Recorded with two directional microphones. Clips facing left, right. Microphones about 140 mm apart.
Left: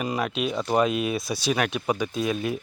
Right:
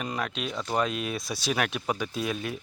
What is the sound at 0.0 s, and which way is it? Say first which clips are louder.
Speech: left 5 dB; 10° left (ahead or behind).